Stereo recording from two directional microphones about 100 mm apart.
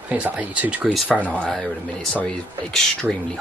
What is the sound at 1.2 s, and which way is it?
Speech, 10° left (ahead or behind).